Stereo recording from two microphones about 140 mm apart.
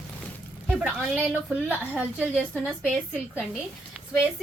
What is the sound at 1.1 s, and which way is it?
Speech, 10° right (ahead or behind).